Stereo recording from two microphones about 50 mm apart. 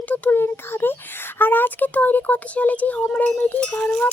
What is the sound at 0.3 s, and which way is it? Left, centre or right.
Speech, left.